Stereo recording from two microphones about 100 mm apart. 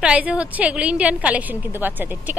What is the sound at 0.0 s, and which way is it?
A woman's voice, 10° right (ahead or behind).